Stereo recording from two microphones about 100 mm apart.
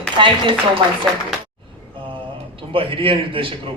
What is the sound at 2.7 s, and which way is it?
Speech, 60° right (ahead or behind).